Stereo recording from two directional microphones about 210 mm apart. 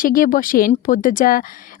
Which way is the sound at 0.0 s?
40° left (ahead or behind).